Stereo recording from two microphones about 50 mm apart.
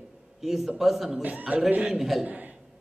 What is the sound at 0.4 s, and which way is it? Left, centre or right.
Speech, centre.